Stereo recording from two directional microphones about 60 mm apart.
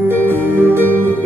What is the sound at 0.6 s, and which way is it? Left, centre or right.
Music, right.